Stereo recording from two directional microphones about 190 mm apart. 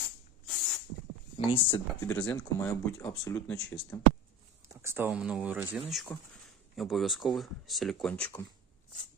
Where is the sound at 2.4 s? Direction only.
5° left (ahead or behind).